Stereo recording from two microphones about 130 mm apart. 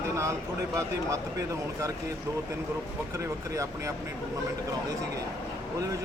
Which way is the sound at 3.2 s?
25° right (ahead or behind).